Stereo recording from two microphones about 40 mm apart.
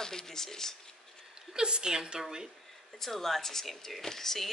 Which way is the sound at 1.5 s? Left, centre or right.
Right.